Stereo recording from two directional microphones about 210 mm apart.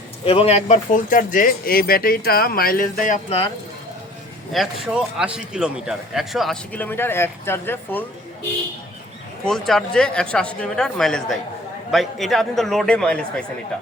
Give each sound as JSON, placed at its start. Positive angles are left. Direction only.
{"t": 0.3, "sound": "speech", "side_deg": 30}
{"t": 4.5, "sound": "a man's voice", "side_deg": 0}
{"t": 9.5, "sound": "a man's voice", "side_deg": 0}